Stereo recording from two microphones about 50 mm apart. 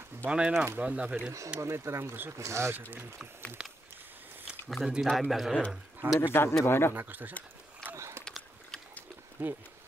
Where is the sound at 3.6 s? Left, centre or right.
Centre.